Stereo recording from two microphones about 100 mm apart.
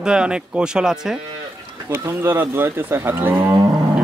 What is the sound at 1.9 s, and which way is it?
Speech, 25° right (ahead or behind).